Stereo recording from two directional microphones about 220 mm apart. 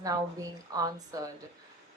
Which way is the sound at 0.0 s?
15° right (ahead or behind).